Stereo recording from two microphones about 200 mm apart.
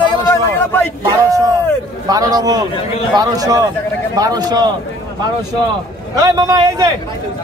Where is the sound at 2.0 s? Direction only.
20° right (ahead or behind).